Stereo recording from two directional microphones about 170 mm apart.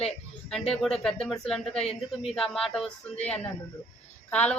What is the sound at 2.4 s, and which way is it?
A woman's voice, centre (ahead or behind).